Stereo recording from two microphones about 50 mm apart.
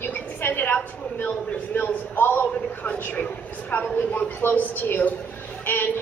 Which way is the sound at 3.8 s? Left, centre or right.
Left.